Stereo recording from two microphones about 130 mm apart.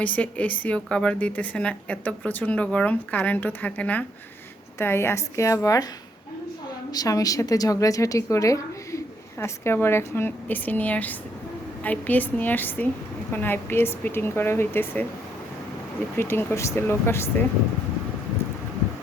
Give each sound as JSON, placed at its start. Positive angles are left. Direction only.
{"t": 0.0, "sound": "a woman's voice", "side_deg": 10}
{"t": 6.9, "sound": "a woman's voice", "side_deg": 30}
{"t": 16.1, "sound": "a woman's voice", "side_deg": 15}